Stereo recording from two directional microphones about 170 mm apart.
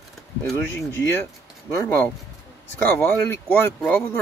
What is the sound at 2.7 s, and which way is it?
Speech, 10° left (ahead or behind).